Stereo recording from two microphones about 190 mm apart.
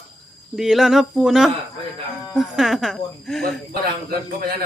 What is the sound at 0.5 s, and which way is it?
Speech, centre (ahead or behind).